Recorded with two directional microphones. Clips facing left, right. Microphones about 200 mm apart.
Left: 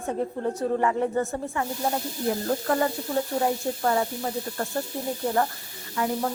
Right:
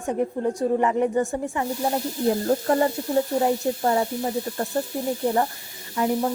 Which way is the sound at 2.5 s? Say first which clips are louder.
Right 4 dB; 30° right (ahead or behind).